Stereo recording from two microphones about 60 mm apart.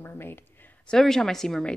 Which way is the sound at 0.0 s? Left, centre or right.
Left.